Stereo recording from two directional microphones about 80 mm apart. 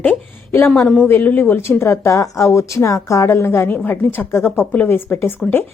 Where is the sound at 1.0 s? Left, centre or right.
Left.